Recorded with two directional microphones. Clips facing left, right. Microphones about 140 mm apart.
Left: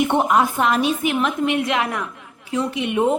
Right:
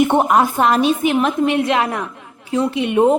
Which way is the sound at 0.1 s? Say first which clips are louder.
Right 3 dB; 45° right (ahead or behind).